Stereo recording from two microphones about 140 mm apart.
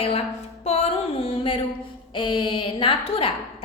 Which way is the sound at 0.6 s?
50° left (ahead or behind).